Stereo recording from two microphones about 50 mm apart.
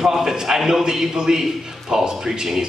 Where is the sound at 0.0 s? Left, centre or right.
Centre.